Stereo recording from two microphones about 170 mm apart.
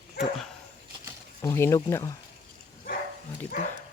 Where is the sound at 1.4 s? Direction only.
15° left (ahead or behind).